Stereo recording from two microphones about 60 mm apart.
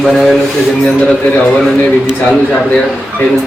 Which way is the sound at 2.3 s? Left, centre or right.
Centre.